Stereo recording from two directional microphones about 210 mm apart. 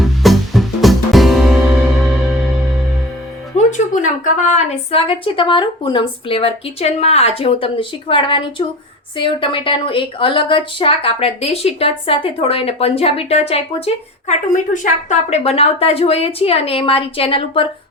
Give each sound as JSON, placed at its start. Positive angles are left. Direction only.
{"t": 0.0, "sound": "music", "side_deg": 0}
{"t": 3.7, "sound": "speech", "side_deg": 35}